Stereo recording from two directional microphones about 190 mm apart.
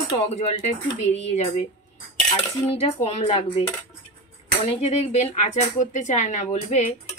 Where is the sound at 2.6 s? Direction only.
35° left (ahead or behind).